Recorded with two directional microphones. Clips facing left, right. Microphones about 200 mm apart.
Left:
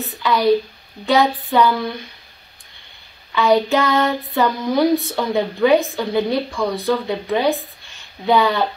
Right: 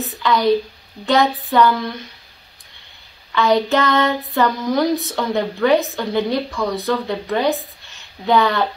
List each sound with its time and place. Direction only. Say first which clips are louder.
0.2 s speech: even; 10° left (ahead or behind)
1.0 s female singing: even; 10° left (ahead or behind)
3.3 s female singing: left 1 dB; 10° left (ahead or behind)